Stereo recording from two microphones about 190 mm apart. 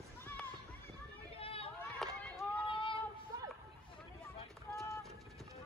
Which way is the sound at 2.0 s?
Centre (ahead or behind).